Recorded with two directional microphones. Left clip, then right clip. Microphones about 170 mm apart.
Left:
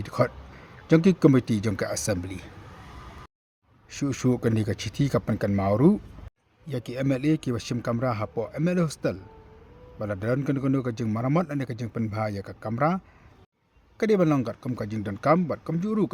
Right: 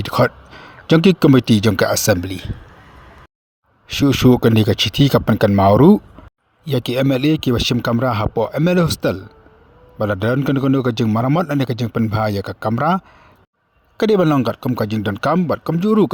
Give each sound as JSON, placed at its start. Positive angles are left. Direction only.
{"t": 0.0, "sound": "speech", "side_deg": -40}
{"t": 3.8, "sound": "speech", "side_deg": -40}